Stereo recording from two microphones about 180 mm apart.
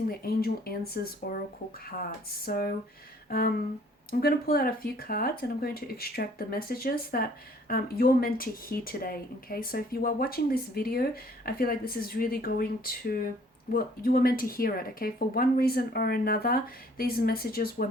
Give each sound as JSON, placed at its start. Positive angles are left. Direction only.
{"t": 0.1, "sound": "speech", "side_deg": 55}
{"t": 3.2, "sound": "a sound", "side_deg": 55}
{"t": 4.1, "sound": "speech", "side_deg": 60}